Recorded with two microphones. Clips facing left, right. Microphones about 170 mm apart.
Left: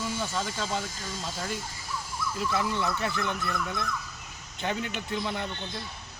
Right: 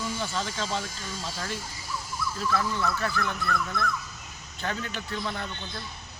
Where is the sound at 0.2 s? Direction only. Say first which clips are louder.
Even; 5° left (ahead or behind).